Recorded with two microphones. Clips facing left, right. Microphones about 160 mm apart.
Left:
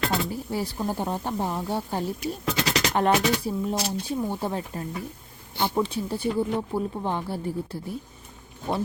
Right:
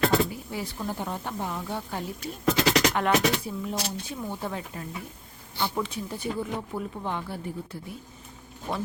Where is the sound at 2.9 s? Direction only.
35° left (ahead or behind).